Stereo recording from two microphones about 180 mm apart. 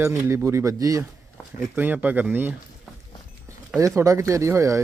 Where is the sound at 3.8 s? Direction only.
15° right (ahead or behind).